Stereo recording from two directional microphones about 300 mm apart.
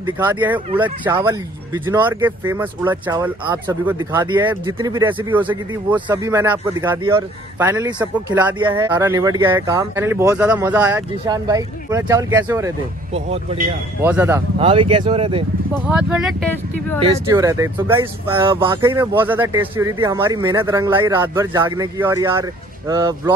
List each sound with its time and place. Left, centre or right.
0.0 s speech: centre
0.8 s speech: centre
8.5 s speech: centre
14.0 s speech: centre
14.6 s speech: centre
15.9 s speech: centre
17.0 s speech: centre